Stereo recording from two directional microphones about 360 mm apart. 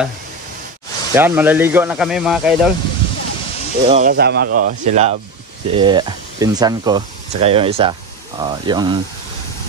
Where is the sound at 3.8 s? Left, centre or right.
Centre.